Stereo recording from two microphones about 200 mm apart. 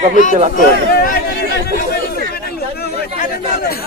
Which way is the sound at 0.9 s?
50° left (ahead or behind).